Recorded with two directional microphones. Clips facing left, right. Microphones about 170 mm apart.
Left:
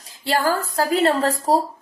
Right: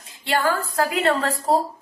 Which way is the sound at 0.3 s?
35° left (ahead or behind).